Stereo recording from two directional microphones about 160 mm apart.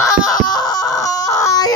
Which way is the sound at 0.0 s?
25° left (ahead or behind).